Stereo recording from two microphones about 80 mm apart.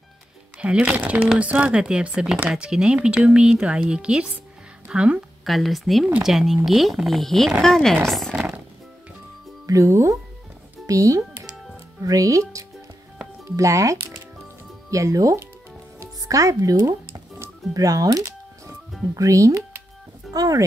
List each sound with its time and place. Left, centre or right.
0.6 s a woman's voice: centre
5.4 s speech: centre
9.7 s speech: right
17.7 s music: right
19.1 s speech: right